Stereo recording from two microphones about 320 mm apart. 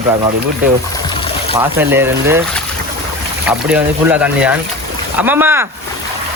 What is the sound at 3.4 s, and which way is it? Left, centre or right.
Speech, centre.